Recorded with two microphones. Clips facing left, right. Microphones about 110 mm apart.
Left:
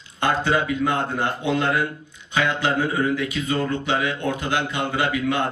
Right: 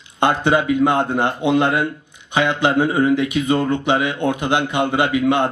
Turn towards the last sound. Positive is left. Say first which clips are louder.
# right 6 dB
turn(degrees=-20)  # may be behind; listen again after turning